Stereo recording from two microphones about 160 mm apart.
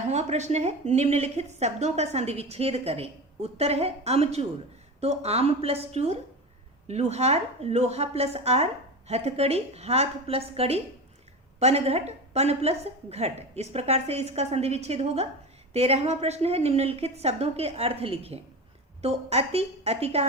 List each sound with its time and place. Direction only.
0.1 s a woman's voice: 45° right (ahead or behind)